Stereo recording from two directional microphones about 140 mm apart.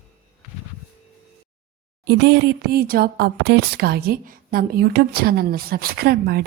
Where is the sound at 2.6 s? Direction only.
90° right.